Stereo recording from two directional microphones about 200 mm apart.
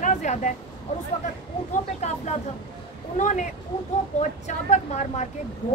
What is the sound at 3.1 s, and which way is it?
Speech, 40° left (ahead or behind).